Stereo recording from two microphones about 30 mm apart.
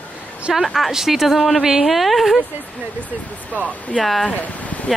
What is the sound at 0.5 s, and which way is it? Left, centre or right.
Speech, centre.